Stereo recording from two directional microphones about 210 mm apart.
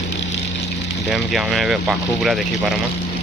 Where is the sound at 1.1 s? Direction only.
Centre (ahead or behind).